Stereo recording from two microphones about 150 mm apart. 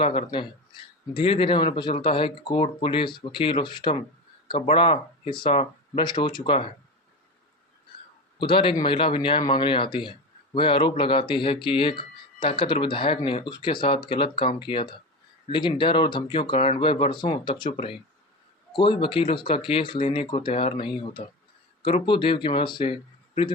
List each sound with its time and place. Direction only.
0.0 s a man's voice: 35° left (ahead or behind)
8.4 s a man's voice: 35° left (ahead or behind)